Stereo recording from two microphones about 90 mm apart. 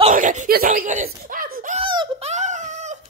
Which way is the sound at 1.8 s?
65° right (ahead or behind).